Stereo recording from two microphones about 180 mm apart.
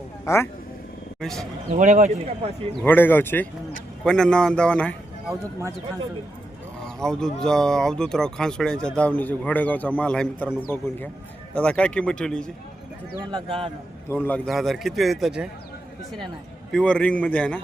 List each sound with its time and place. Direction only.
0.3 s a man's voice: 15° left (ahead or behind)
1.2 s speech: centre (ahead or behind)
1.7 s speech: 40° right (ahead or behind)
2.8 s a man's voice: 10° left (ahead or behind)
6.8 s a man's voice: 5° left (ahead or behind)
13.3 s a man's voice: 30° right (ahead or behind)
14.1 s speech: 10° left (ahead or behind)
16.7 s a man's voice: 5° left (ahead or behind)